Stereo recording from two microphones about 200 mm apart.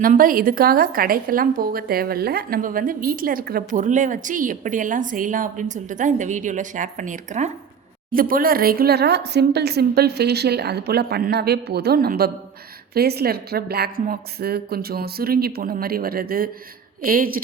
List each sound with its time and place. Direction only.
0.0 s a woman's voice: 45° right (ahead or behind)